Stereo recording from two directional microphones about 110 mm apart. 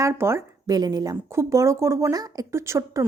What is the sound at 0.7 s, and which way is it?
Speech, 40° right (ahead or behind).